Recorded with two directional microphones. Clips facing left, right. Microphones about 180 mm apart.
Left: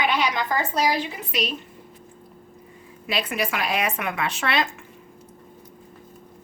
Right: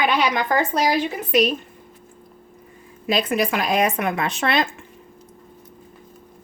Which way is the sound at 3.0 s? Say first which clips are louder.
Right 6 dB; 40° right (ahead or behind).